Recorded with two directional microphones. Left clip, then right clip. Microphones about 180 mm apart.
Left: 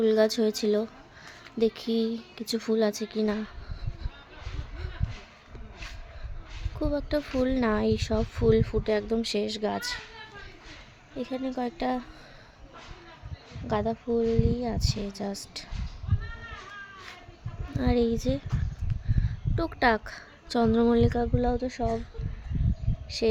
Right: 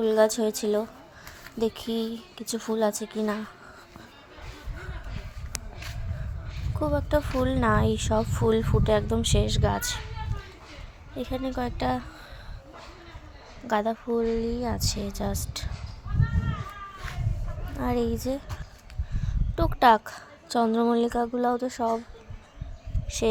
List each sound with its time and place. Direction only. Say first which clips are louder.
0.0 s speech: right 1 dB; 20° left (ahead or behind)
6.7 s a woman's voice: right 3 dB; 15° left (ahead or behind)
11.2 s a woman's voice: right 1 dB; 5° left (ahead or behind)
13.7 s a woman's voice: right 2 dB; 5° left (ahead or behind)
17.7 s speech: left 1 dB; 25° left (ahead or behind)
19.5 s a woman's voice: right 5 dB; 5° left (ahead or behind)